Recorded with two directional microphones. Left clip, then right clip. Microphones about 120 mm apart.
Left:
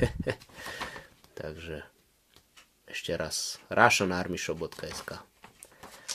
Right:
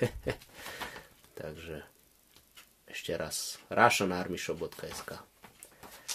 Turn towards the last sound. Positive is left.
turn(degrees=35)  # may be behind; listen again after turning